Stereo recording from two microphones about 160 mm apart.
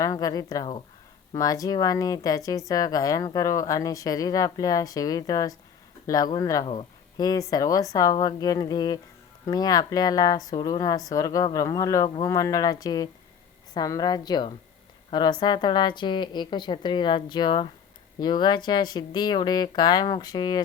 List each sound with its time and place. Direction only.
0.0 s speech: 20° left (ahead or behind)